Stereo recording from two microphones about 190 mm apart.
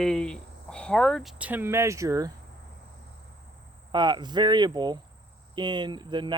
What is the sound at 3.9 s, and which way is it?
Speech, 25° right (ahead or behind).